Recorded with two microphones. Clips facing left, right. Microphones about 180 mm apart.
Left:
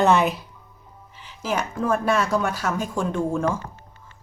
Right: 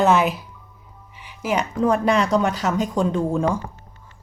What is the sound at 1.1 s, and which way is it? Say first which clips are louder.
Speech: right 3 dB; 15° right (ahead or behind).